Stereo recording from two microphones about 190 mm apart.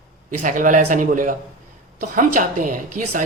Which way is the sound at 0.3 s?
45° right (ahead or behind).